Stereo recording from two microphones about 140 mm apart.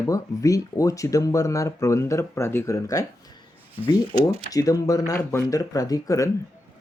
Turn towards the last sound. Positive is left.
turn(degrees=25)  # may be behind; listen again after turning